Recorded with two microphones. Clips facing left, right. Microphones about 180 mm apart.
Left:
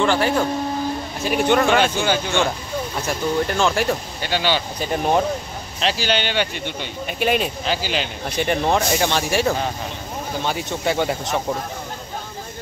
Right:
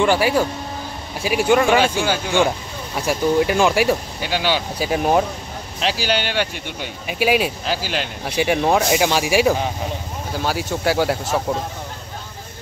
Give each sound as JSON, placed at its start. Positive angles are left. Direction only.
{"t": 0.0, "sound": "speech", "side_deg": -10}